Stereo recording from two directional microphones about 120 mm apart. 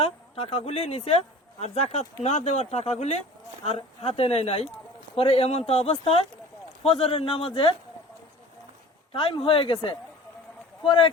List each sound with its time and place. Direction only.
0.0 s speech: 55° left (ahead or behind)
9.1 s speech: 45° left (ahead or behind)